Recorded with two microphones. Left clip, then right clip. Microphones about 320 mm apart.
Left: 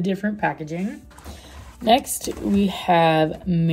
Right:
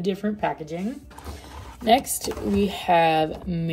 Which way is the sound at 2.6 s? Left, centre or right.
Left.